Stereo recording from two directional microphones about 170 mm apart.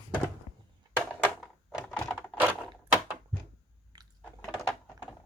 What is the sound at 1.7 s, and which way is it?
Typing, 5° left (ahead or behind).